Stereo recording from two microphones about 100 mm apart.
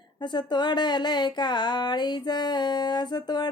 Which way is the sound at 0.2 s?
45° left (ahead or behind).